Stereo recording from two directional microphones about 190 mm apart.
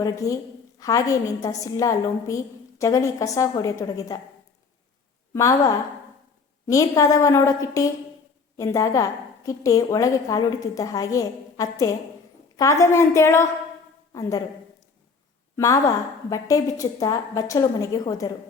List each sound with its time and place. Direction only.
0.0 s a woman's voice: 15° left (ahead or behind)
5.3 s a woman's voice: 15° left (ahead or behind)
15.5 s a woman's voice: 15° left (ahead or behind)